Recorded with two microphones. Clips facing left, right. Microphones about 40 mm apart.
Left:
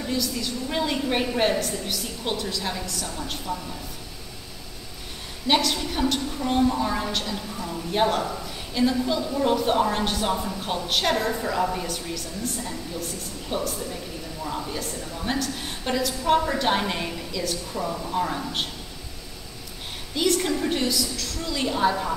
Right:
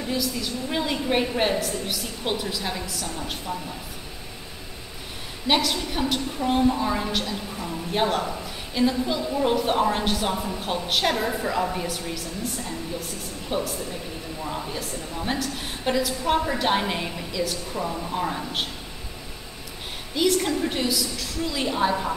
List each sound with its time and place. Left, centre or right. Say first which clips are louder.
0.1 s a woman's voice: even; centre
5.5 s a woman's voice: even; centre
13.5 s a woman's voice: right 1 dB; centre
20.2 s a woman's voice: right 1 dB; centre